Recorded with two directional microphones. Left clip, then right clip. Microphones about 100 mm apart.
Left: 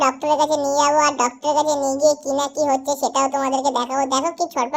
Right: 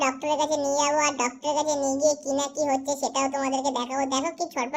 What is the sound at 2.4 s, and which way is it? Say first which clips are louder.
A child's voice: left 6 dB; 30° left (ahead or behind).